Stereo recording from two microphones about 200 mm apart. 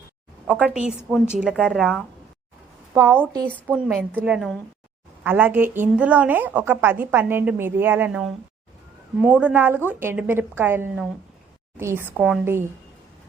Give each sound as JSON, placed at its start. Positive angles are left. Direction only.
{"t": 0.5, "sound": "a woman's voice", "side_deg": 5}
{"t": 2.9, "sound": "a woman's voice", "side_deg": -15}